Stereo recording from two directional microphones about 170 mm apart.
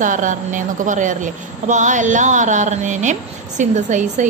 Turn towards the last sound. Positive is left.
turn(degrees=-45)  # may be behind; listen again after turning